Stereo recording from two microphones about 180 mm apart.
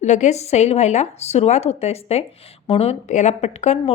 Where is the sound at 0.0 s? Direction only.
40° left (ahead or behind).